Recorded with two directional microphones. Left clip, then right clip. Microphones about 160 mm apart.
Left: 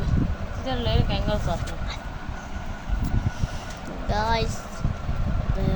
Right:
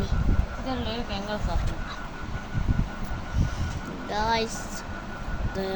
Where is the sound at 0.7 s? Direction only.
60° left (ahead or behind).